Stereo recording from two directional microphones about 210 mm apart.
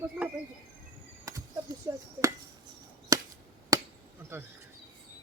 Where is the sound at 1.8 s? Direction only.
15° right (ahead or behind).